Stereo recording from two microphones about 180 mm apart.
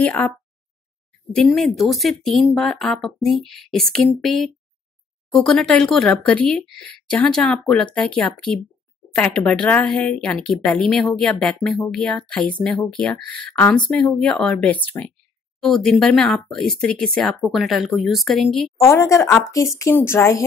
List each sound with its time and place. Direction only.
0.0 s a woman's voice: 10° left (ahead or behind)
1.3 s speech: centre (ahead or behind)
18.8 s a woman's voice: 15° left (ahead or behind)